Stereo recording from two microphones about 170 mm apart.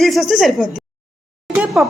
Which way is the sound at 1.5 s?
5° right (ahead or behind).